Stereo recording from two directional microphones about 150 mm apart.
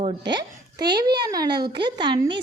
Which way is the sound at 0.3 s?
30° right (ahead or behind).